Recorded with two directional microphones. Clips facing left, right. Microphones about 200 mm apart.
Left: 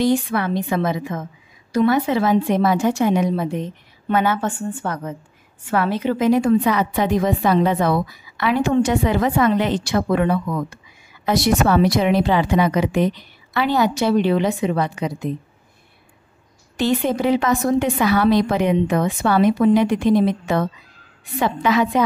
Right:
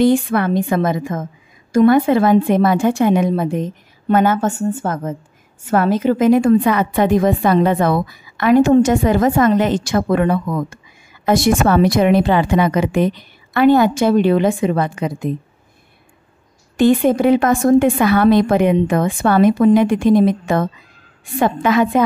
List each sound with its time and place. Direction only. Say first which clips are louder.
0.0 s a woman's voice: right 5 dB; 55° right (ahead or behind)
16.7 s a woman's voice: right 7 dB; 50° right (ahead or behind)